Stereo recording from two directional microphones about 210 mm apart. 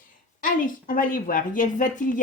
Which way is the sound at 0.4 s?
40° left (ahead or behind).